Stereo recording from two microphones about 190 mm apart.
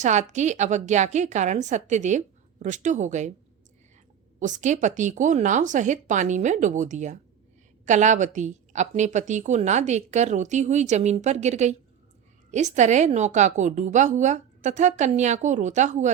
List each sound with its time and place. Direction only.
0.0 s a woman's voice: 40° right (ahead or behind)
4.4 s a woman's voice: 40° right (ahead or behind)